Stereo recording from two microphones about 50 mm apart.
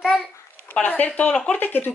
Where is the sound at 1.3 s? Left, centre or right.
Centre.